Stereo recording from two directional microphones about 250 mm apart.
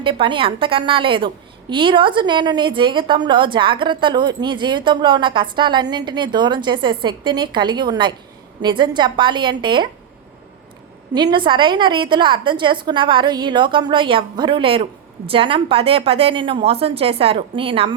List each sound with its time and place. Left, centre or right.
0.0 s a woman's voice: centre
11.1 s a woman's voice: centre